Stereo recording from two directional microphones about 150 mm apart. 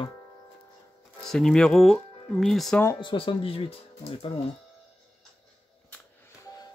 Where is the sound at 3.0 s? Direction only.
35° left (ahead or behind).